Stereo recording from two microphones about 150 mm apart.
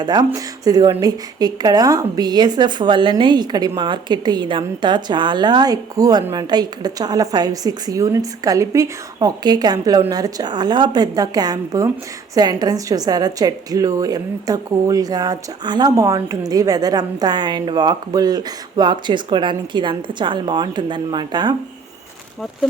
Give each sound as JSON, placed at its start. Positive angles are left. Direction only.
{"t": 0.0, "sound": "a woman's voice", "side_deg": -30}